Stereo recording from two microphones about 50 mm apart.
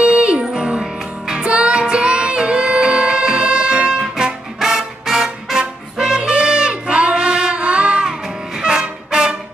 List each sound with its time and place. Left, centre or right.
0.0 s music: centre
4.6 s trumpet: centre